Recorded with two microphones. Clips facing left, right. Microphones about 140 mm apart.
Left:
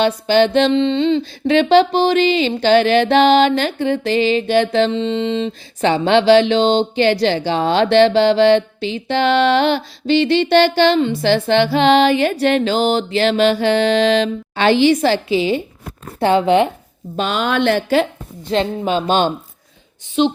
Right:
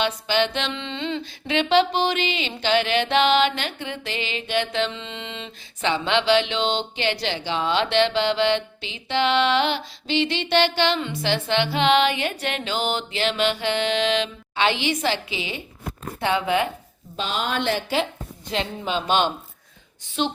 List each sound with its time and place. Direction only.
0.0 s music: 35° left (ahead or behind)
17.2 s a woman's voice: 70° left (ahead or behind)
18.5 s music: 40° left (ahead or behind)
20.2 s speech: 20° left (ahead or behind)